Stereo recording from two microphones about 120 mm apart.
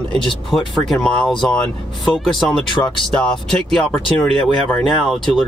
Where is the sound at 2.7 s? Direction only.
40° left (ahead or behind).